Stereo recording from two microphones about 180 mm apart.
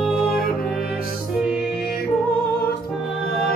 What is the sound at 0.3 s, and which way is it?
Music, 55° left (ahead or behind).